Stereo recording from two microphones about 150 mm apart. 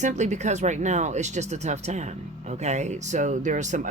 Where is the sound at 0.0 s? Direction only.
50° right (ahead or behind).